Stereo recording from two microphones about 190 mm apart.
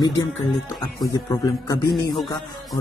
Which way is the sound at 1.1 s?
15° left (ahead or behind).